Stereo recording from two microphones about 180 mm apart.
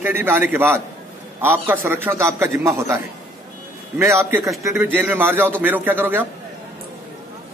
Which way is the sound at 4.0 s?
15° right (ahead or behind).